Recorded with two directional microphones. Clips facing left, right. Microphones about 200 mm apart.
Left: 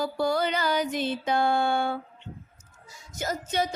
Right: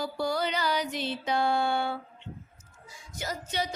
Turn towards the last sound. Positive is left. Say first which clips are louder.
# left 5 dB
turn(degrees=45)  # may be behind; listen again after turning